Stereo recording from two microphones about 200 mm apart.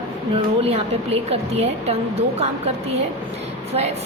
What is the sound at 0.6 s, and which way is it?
A woman's voice, 30° right (ahead or behind).